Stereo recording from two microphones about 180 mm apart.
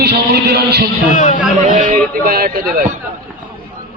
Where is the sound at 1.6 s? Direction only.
45° right (ahead or behind).